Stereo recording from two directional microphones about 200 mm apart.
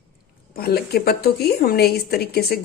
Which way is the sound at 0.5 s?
50° left (ahead or behind).